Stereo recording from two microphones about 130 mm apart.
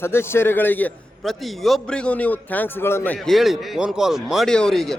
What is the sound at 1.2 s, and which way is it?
A man's voice, centre (ahead or behind).